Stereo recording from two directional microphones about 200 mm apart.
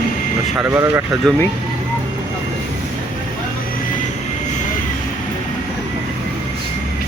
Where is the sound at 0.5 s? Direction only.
10° right (ahead or behind).